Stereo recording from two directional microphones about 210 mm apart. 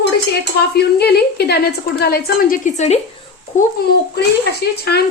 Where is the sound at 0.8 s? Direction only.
50° left (ahead or behind); by 3.0 s 35° left (ahead or behind).